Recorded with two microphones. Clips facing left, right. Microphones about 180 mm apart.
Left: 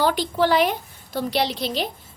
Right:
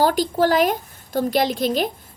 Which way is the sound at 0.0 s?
45° right (ahead or behind).